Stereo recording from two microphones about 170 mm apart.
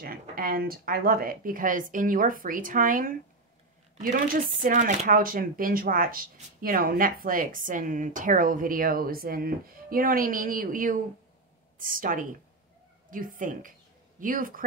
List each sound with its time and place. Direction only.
0.0 s a woman's voice: 60° right (ahead or behind)